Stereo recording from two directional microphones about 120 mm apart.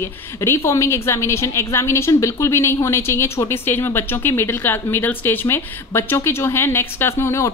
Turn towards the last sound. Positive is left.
turn(degrees=25)  # may be behind; listen again after turning